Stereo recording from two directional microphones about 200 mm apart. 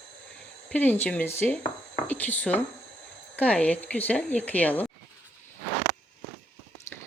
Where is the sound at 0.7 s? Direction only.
10° left (ahead or behind).